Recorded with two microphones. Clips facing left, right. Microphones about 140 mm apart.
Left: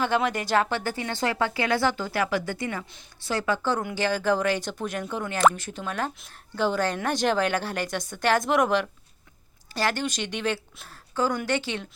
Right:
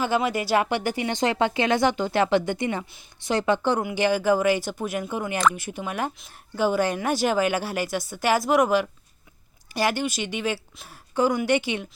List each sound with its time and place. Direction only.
0.0 s a woman's voice: 5° right (ahead or behind)